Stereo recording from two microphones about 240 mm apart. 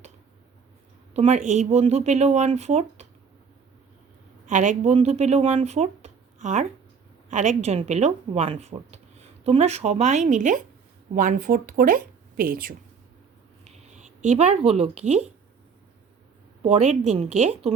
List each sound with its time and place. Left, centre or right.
1.1 s speech: right
4.4 s speech: right
16.6 s speech: right